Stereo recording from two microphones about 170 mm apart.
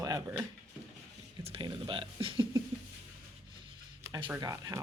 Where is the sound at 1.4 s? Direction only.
30° right (ahead or behind).